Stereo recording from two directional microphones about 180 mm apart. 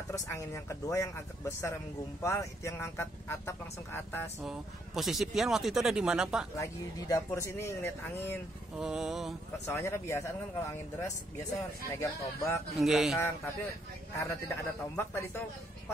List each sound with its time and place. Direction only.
0.1 s speech: 15° left (ahead or behind)
4.4 s speech: centre (ahead or behind)
6.6 s speech: 20° left (ahead or behind)
8.7 s speech: 5° right (ahead or behind)
9.7 s speech: 15° left (ahead or behind)
12.7 s speech: centre (ahead or behind)
14.5 s speech: 15° left (ahead or behind)